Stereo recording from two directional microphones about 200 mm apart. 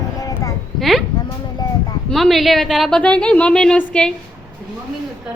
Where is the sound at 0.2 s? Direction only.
15° left (ahead or behind).